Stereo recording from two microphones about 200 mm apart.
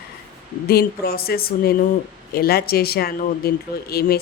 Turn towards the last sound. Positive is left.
turn(degrees=50)  # may be behind; listen again after turning